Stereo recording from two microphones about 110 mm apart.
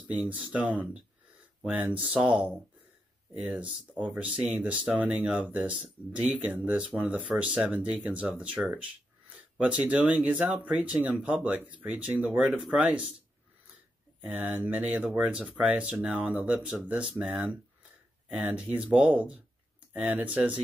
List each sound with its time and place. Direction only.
0.1 s speech: 15° right (ahead or behind)
14.2 s speech: 10° right (ahead or behind)